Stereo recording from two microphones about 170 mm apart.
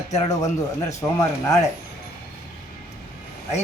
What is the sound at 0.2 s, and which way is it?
Speech, 20° left (ahead or behind).